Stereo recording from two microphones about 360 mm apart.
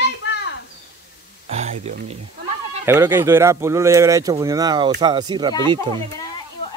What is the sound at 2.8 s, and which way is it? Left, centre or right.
Speech, centre.